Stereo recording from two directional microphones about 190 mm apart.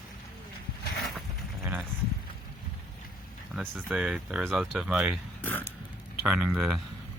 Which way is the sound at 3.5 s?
5° right (ahead or behind).